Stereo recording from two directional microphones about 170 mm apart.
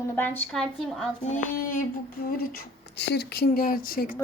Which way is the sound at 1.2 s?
45° left (ahead or behind).